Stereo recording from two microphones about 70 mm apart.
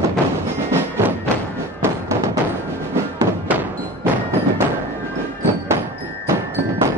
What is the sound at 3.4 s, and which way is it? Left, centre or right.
Music, right.